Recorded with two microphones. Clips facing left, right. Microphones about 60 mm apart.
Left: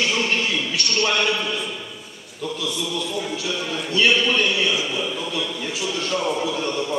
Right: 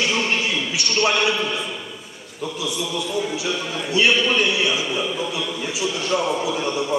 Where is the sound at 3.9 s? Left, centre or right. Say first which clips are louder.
Right 1 dB; centre.